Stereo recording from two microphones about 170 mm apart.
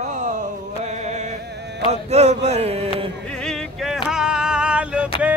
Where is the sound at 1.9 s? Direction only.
40° right (ahead or behind).